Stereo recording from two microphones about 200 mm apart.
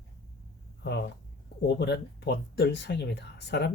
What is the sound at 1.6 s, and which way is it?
Speech, 55° left (ahead or behind).